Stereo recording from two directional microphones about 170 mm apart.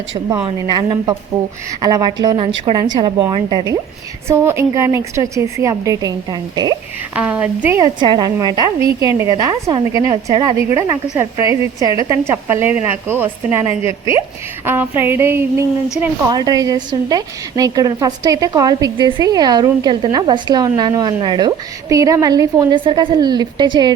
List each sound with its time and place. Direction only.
0.4 s a woman's voice: 25° right (ahead or behind)
4.3 s a woman's voice: 15° right (ahead or behind)
7.2 s a woman's voice: 10° right (ahead or behind)
7.8 s a woman's voice: 25° right (ahead or behind)